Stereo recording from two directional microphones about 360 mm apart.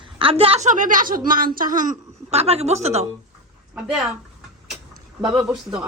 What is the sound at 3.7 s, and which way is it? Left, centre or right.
Speech, centre.